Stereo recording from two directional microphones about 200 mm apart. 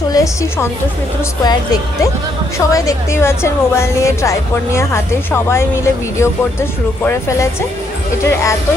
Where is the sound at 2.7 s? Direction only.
15° left (ahead or behind).